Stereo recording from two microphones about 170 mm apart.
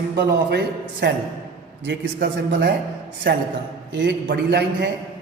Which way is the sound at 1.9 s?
75° right (ahead or behind).